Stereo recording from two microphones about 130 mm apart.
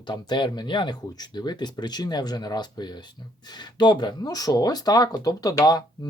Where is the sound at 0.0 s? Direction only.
35° left (ahead or behind).